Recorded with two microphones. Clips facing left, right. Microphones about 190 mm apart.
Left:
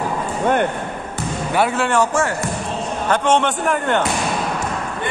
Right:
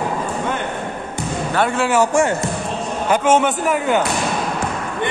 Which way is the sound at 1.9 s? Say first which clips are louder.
Right 2 dB; 10° right (ahead or behind).